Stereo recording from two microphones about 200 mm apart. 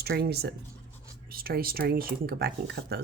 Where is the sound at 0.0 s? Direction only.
50° right (ahead or behind).